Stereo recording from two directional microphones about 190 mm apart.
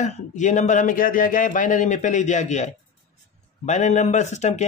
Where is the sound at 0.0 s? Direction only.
40° left (ahead or behind).